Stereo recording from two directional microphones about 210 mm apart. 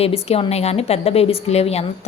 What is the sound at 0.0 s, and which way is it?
A woman's voice, 30° left (ahead or behind).